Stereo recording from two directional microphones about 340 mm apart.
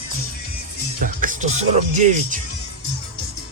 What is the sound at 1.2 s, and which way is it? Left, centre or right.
Music, right.